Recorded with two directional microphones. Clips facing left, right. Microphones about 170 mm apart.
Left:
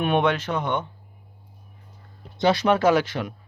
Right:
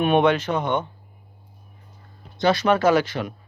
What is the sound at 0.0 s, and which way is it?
Speech, 10° right (ahead or behind).